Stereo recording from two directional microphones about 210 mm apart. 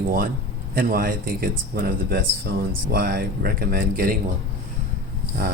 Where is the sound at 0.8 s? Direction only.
45° right (ahead or behind).